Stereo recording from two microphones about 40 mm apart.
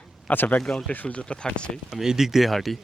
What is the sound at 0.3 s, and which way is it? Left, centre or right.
Speech, left.